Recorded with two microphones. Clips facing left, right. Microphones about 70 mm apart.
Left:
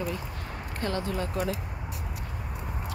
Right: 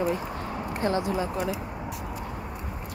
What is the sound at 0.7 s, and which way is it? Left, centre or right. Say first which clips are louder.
Speech: right 4 dB; centre.